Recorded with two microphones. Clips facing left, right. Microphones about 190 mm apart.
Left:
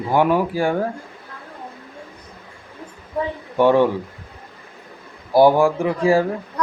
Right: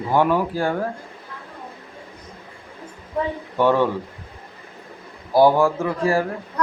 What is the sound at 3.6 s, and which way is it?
Speech, 15° left (ahead or behind).